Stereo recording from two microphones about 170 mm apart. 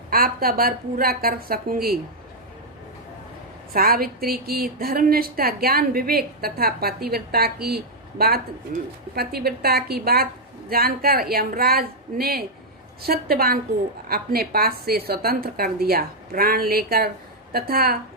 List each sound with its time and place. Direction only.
0.1 s speech: 60° right (ahead or behind)
3.7 s speech: 60° right (ahead or behind)